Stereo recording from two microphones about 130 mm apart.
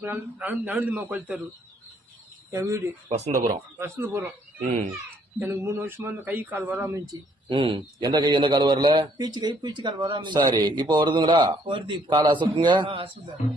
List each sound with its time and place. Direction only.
0.0 s speech: 15° right (ahead or behind)
2.5 s speech: 20° right (ahead or behind)
3.1 s speech: 60° right (ahead or behind)
3.8 s speech: 20° right (ahead or behind)
5.4 s speech: 15° right (ahead or behind)
7.4 s a man's voice: 40° right (ahead or behind)